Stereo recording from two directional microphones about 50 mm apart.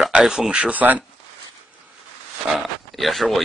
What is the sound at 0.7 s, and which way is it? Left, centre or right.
Speech, right.